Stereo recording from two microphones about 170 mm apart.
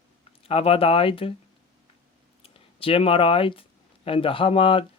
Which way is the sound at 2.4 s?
35° left (ahead or behind).